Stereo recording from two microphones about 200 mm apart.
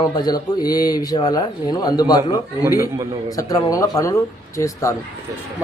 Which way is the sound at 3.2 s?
15° left (ahead or behind).